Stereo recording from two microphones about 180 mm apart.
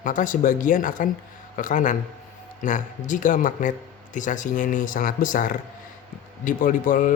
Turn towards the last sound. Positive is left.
turn(degrees=45)  # may be behind; listen again after turning